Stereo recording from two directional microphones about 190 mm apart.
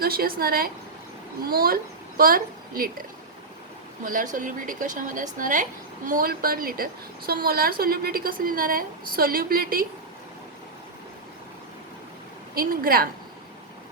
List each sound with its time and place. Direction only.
0.0 s a woman's voice: 55° right (ahead or behind)
4.0 s a woman's voice: 45° right (ahead or behind)
12.5 s a woman's voice: 50° right (ahead or behind)